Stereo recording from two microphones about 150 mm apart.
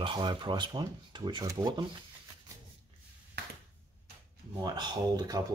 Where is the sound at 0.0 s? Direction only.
30° right (ahead or behind).